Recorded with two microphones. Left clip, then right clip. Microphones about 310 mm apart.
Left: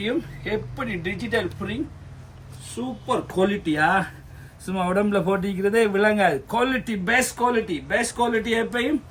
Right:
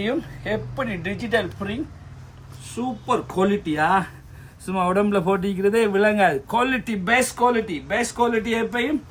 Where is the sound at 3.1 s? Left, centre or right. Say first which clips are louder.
Right 1 dB; centre.